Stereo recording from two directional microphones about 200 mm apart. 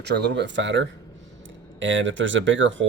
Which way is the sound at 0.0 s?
60° right (ahead or behind).